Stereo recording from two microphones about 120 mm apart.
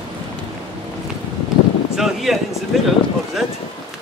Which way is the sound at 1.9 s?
Centre (ahead or behind).